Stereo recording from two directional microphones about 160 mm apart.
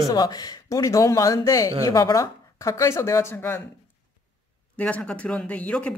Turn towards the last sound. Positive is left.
turn(degrees=5)  # may be behind; listen again after turning